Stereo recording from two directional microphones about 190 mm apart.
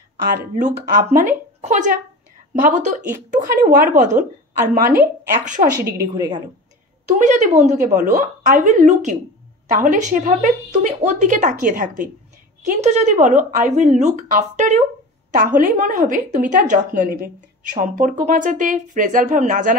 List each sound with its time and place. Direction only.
0.6 s a woman's voice: 45° right (ahead or behind)
5.8 s a woman's voice: 15° right (ahead or behind)
7.1 s a woman's voice: 40° right (ahead or behind)